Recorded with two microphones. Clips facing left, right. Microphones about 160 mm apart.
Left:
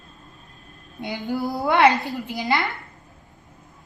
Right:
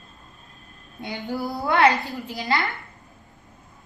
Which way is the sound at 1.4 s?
20° left (ahead or behind).